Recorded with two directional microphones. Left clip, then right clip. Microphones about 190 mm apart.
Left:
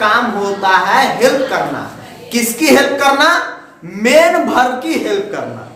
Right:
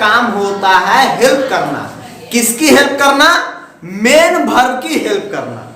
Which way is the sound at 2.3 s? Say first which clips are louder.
Right 1 dB; 15° right (ahead or behind).